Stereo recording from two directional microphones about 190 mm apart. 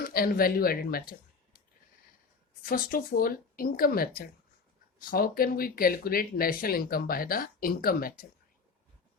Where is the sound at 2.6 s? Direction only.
45° left (ahead or behind).